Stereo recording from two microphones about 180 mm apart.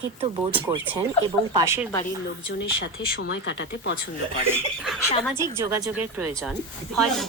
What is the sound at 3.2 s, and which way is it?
Speech, 85° left.